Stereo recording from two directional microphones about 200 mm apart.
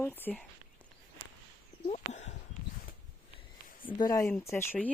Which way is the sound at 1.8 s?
35° left (ahead or behind).